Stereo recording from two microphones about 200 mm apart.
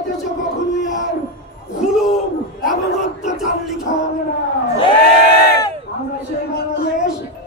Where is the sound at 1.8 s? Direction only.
Centre (ahead or behind).